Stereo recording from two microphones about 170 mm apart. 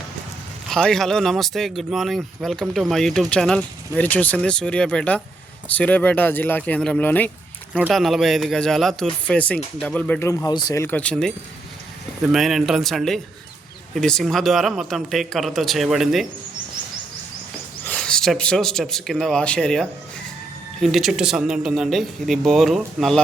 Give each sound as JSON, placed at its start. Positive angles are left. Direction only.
{"t": 0.7, "sound": "speech", "side_deg": 5}
{"t": 7.7, "sound": "speech", "side_deg": 0}
{"t": 17.8, "sound": "a man's voice", "side_deg": 5}